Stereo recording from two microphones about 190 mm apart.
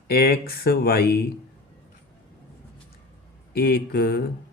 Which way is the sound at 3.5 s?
50° left (ahead or behind).